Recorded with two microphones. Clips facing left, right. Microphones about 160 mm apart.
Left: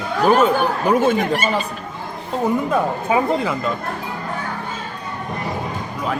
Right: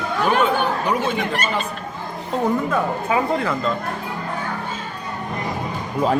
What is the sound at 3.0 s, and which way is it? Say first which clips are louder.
Speech: left 3 dB; 20° left (ahead or behind).